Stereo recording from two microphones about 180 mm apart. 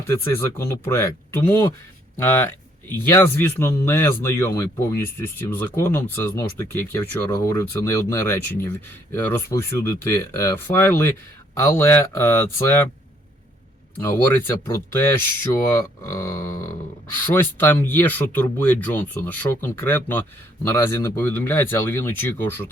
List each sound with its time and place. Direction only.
0.1 s a man's voice: 15° left (ahead or behind)
14.1 s a man's voice: 15° left (ahead or behind)